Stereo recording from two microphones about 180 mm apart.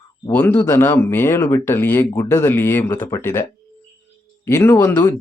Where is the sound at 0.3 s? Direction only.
10° left (ahead or behind).